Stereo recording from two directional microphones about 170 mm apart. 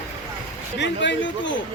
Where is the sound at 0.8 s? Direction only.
90° left.